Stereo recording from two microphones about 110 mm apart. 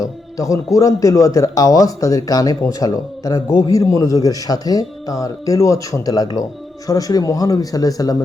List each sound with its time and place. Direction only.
0.3 s speech: 30° left (ahead or behind)